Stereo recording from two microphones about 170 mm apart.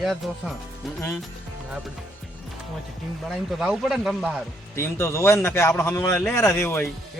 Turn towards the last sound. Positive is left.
turn(degrees=15)  # may be behind; listen again after turning